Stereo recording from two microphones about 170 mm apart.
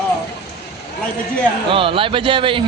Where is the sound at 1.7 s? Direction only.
30° right (ahead or behind).